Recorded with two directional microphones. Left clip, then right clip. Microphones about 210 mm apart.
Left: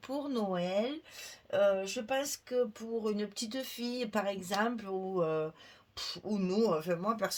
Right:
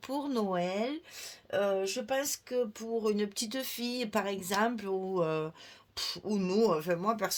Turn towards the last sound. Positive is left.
turn(degrees=-40)  # may be behind; listen again after turning